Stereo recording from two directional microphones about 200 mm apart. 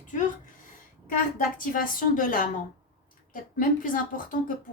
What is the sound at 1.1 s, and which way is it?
A woman's voice, 45° left (ahead or behind).